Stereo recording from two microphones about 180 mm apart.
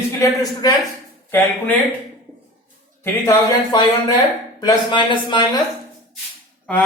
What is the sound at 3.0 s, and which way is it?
Speech, 20° left (ahead or behind).